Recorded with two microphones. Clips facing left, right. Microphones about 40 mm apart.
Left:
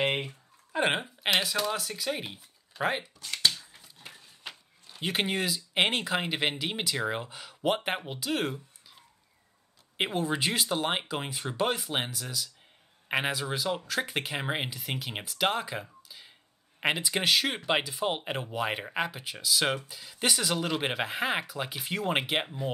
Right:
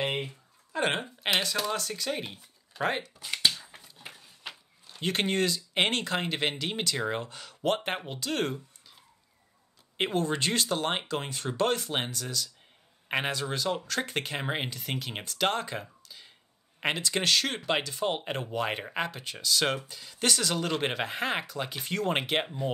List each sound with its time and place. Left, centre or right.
0.7 s speech: centre
3.2 s speech: centre
3.5 s a sound: right
3.8 s a sound: centre
6.6 s speech: centre
9.9 s speech: centre